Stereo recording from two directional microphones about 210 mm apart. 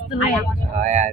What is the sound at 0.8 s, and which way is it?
Speech, 35° right (ahead or behind).